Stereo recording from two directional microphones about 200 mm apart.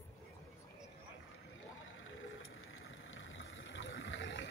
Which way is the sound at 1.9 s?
90° left.